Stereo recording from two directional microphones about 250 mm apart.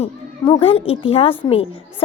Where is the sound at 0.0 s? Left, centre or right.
Left.